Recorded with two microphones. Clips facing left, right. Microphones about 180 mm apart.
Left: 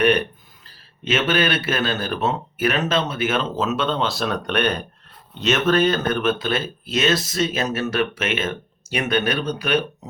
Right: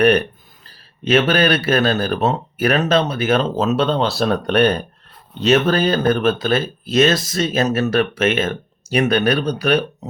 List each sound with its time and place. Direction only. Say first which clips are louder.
1.0 s speech: right 5 dB; 40° right (ahead or behind)